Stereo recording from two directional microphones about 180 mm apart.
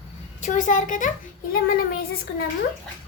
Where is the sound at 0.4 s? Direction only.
45° left (ahead or behind).